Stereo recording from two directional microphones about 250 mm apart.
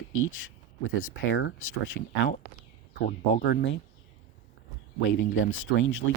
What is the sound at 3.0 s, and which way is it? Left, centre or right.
Speech, left.